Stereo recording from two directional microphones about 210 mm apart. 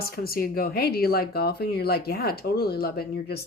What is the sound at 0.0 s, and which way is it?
Speech, 45° left (ahead or behind).